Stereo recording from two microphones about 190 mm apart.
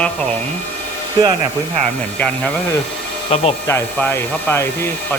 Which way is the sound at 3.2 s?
30° left (ahead or behind).